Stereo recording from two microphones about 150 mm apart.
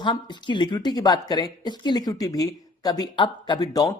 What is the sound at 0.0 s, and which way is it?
A woman's voice, 30° left (ahead or behind).